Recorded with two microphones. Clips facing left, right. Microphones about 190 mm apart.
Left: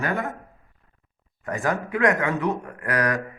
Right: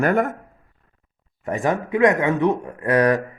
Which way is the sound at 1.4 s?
25° right (ahead or behind).